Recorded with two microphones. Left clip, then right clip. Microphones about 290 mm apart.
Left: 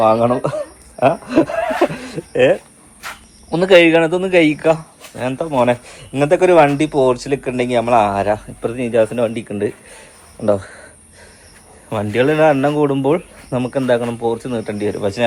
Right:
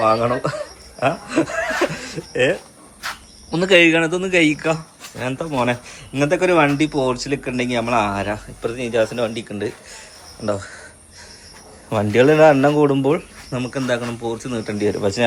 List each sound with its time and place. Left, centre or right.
0.0 s chuckle: centre
3.5 s speech: centre
8.6 s speech: left
11.9 s speech: centre